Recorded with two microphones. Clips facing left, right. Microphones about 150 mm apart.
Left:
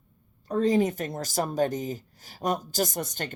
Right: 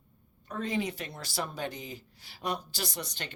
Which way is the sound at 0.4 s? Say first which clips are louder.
Left 10 dB; 35° left (ahead or behind).